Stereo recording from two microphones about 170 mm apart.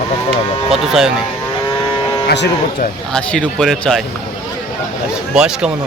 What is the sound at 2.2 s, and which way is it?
Speech, 90° left.